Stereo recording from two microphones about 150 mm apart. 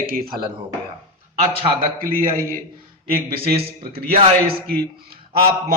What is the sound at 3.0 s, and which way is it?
A man's voice, 85° right.